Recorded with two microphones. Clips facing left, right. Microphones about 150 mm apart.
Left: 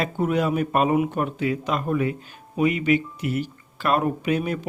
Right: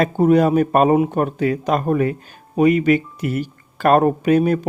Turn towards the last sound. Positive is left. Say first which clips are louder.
# right 8 dB
turn(degrees=-45)  # may be behind; listen again after turning